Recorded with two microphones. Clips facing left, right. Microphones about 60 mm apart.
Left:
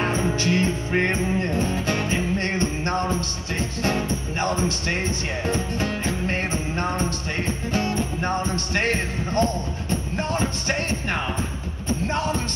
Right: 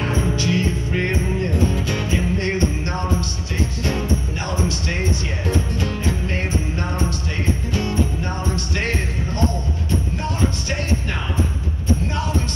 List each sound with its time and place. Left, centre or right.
0.0 s music: left